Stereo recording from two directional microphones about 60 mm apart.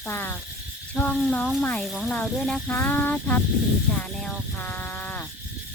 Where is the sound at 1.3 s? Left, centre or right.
Centre.